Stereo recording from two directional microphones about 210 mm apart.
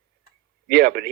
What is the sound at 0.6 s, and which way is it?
Speech, 50° right (ahead or behind).